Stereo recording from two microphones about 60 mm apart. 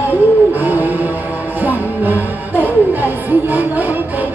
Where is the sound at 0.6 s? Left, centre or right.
Right.